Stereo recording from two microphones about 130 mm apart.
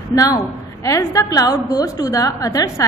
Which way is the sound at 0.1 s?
25° left (ahead or behind).